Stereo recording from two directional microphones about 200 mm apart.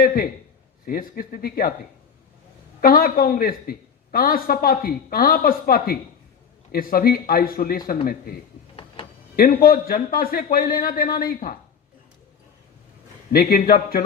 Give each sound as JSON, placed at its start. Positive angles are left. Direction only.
{"t": 0.0, "sound": "speech", "side_deg": 45}
{"t": 2.8, "sound": "speech", "side_deg": 45}
{"t": 13.3, "sound": "speech", "side_deg": 45}